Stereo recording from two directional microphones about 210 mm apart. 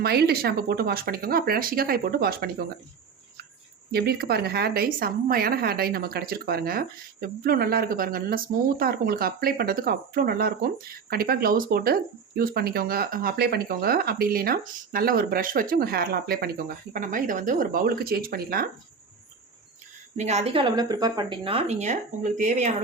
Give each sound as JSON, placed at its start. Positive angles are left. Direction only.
{"t": 0.0, "sound": "speech", "side_deg": -50}
{"t": 3.9, "sound": "speech", "side_deg": -50}
{"t": 20.1, "sound": "a woman's voice", "side_deg": -30}